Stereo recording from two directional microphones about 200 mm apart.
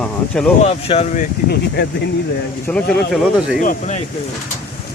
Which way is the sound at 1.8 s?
60° left (ahead or behind).